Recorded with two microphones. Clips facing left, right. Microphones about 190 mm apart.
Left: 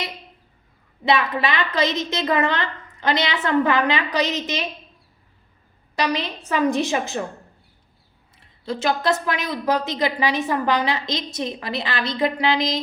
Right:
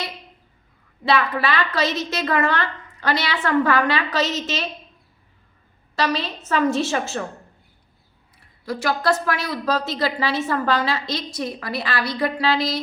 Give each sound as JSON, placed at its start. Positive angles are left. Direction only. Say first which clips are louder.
{"t": 1.0, "sound": "a woman's voice", "louder": "even", "side_deg": 20}
{"t": 6.0, "sound": "a woman's voice", "louder": "even", "side_deg": 15}
{"t": 8.6, "sound": "a woman's voice", "louder": "even", "side_deg": 25}